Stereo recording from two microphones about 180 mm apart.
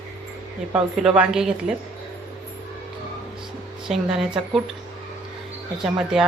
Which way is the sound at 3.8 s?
Centre (ahead or behind).